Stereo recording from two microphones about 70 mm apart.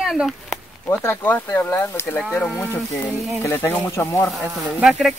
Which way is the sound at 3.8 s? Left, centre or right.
Left.